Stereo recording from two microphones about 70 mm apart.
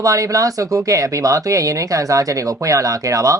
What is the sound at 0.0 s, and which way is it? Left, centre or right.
Speech, right.